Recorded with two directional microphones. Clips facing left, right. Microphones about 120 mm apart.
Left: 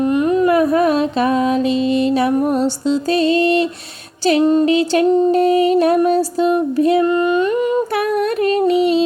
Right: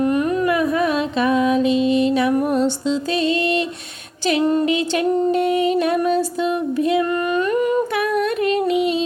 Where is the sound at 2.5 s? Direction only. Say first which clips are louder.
Left 2 dB; 35° left (ahead or behind).